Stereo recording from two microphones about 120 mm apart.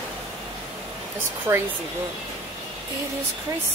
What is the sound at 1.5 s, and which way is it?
Speech, 20° right (ahead or behind).